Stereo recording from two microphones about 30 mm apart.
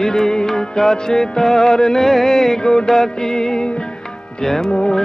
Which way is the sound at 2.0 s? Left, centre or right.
Centre.